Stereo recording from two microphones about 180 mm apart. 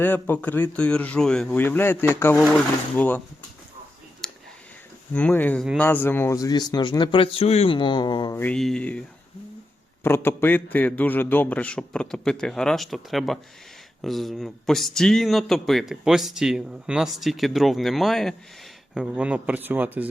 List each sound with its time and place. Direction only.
0.0 s a man's voice: 10° left (ahead or behind)
4.2 s clicking: centre (ahead or behind)
5.1 s a man's voice: 10° left (ahead or behind); by 8.4 s 25° left (ahead or behind)
8.4 s a man's voice: 5° left (ahead or behind); by 20.1 s 10° right (ahead or behind)